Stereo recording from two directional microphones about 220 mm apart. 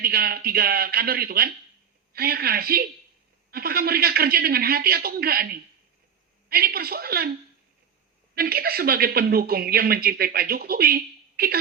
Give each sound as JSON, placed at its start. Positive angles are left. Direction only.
{"t": 0.0, "sound": "speech", "side_deg": -45}
{"t": 6.5, "sound": "speech", "side_deg": -45}
{"t": 8.4, "sound": "speech", "side_deg": -45}